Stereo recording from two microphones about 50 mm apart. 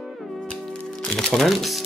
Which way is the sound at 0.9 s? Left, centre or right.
Centre.